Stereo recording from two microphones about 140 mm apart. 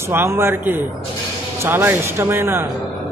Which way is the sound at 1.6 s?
15° right (ahead or behind).